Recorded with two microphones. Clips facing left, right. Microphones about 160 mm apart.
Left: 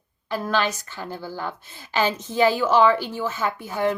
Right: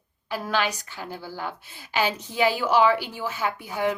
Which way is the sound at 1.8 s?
10° right (ahead or behind).